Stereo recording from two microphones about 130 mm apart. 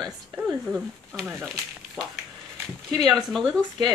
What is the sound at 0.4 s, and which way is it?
Speech, 10° right (ahead or behind).